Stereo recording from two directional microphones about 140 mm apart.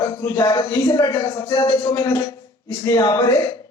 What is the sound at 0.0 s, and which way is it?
A woman's voice, 25° left (ahead or behind).